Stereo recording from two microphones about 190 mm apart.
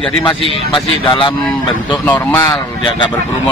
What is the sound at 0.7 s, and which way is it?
A man's voice, 25° left (ahead or behind).